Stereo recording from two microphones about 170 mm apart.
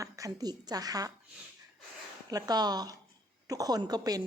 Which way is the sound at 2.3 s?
25° right (ahead or behind).